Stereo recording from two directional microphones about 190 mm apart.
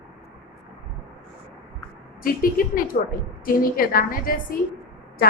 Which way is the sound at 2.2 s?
50° left (ahead or behind).